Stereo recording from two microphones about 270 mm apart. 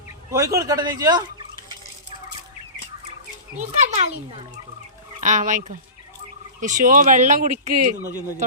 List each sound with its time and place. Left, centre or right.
0.3 s speech: centre
3.6 s speech: right
5.2 s speech: right